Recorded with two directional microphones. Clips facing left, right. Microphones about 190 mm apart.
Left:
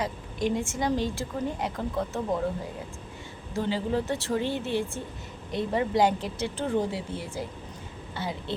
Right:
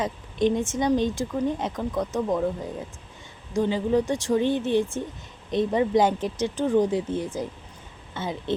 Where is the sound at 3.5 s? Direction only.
15° right (ahead or behind).